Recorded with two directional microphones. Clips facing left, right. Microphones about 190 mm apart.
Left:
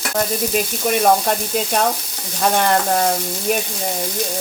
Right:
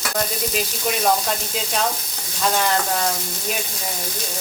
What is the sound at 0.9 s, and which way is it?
Sizzle, 55° left (ahead or behind).